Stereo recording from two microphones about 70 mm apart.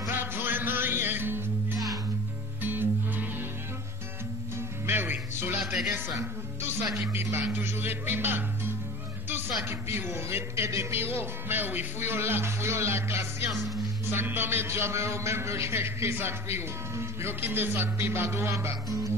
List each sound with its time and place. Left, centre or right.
0.1 s music: right
2.6 s music: right
4.8 s music: right
5.6 s music: centre
6.1 s a man's voice: right
9.7 s a man's voice: right
13.5 s speech: centre
14.1 s a man's voice: right